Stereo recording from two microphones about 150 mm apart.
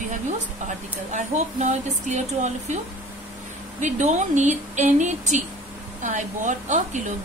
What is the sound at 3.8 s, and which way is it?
A woman's voice, 50° right (ahead or behind).